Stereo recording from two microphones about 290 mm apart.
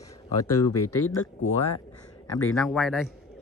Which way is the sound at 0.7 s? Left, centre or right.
Left.